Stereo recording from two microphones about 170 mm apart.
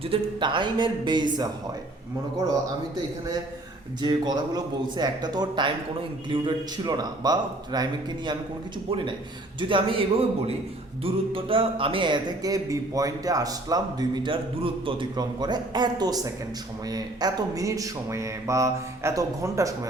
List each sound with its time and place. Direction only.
0.0 s speech: 30° right (ahead or behind)
4.0 s a man's voice: 25° right (ahead or behind)